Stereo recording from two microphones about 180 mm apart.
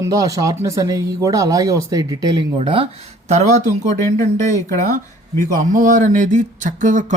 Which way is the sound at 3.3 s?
40° right (ahead or behind).